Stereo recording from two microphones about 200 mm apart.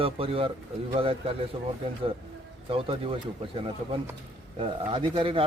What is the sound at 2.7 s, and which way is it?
Speech, 30° right (ahead or behind).